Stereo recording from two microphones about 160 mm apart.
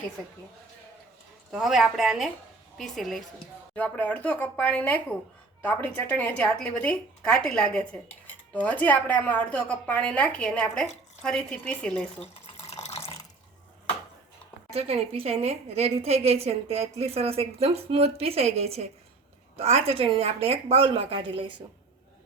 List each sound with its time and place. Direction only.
1.5 s a woman's voice: centre (ahead or behind)
12.2 s drip: 40° left (ahead or behind)
14.8 s a woman's voice: 40° right (ahead or behind)